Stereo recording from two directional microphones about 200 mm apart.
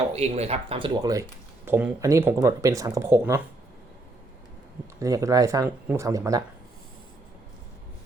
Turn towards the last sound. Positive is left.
turn(degrees=-15)  # may be behind; listen again after turning